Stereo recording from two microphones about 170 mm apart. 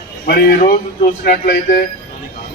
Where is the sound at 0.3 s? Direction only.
55° left (ahead or behind).